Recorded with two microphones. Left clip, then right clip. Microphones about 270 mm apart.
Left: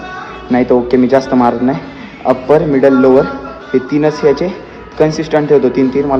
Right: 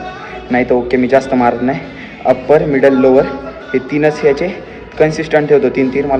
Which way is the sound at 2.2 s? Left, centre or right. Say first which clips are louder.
Even; left.